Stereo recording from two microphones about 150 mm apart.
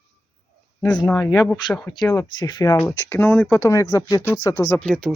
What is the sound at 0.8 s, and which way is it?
Speech, 5° left (ahead or behind).